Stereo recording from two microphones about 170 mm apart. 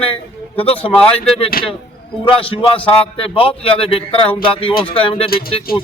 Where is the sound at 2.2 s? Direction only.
30° left (ahead or behind).